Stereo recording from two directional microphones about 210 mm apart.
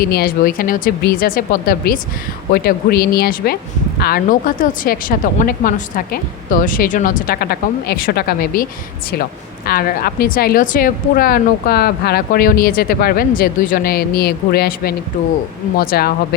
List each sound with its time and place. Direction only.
0.0 s a woman's voice: 45° left (ahead or behind)
9.6 s a woman's voice: 45° left (ahead or behind)